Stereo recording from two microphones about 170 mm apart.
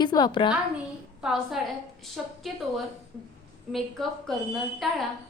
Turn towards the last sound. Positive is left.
turn(degrees=0)  # may be behind; listen again after turning